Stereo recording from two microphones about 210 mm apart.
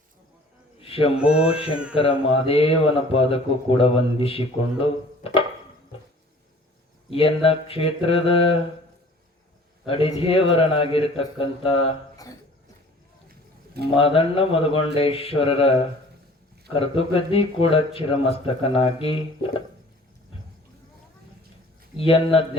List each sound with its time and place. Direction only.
0.8 s a sound: 25° left (ahead or behind)
1.2 s speech: 5° right (ahead or behind)
1.5 s speech: 25° left (ahead or behind)
7.1 s speech: 25° left (ahead or behind)
9.8 s speech: 25° left (ahead or behind)
13.9 s speech: 25° left (ahead or behind)
21.9 s speech: 25° left (ahead or behind)